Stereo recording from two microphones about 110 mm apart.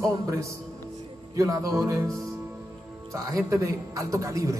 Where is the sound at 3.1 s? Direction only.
30° right (ahead or behind).